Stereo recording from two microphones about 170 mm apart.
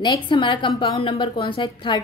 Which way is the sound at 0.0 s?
30° left (ahead or behind).